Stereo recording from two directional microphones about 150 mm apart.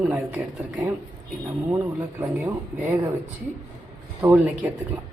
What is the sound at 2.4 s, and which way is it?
Speech, 15° right (ahead or behind).